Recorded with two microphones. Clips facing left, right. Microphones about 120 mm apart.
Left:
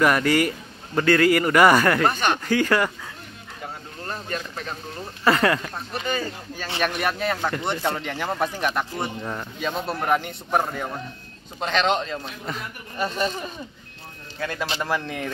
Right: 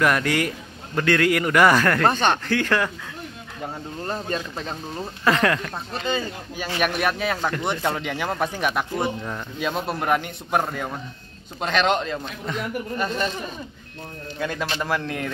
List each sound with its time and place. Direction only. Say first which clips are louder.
0.0 s speech: left 2 dB; 5° left (ahead or behind)
2.0 s speech: right 2 dB; 30° right (ahead or behind)
2.3 s speech: left 1 dB; 10° left (ahead or behind)
4.0 s speech: right 3 dB; 30° right (ahead or behind)
5.2 s speech: left 1 dB; 5° left (ahead or behind)
6.0 s speech: right 2 dB; 20° right (ahead or behind)
6.8 s speech: right 1 dB; centre (ahead or behind)
14.4 s speech: right 1 dB; 5° right (ahead or behind)